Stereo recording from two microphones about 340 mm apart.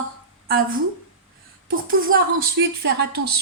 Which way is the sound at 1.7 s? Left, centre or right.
Right.